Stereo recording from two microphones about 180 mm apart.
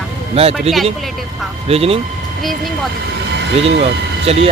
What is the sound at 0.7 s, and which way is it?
Speech, 35° right (ahead or behind).